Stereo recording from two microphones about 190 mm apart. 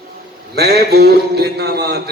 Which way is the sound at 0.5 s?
60° right (ahead or behind).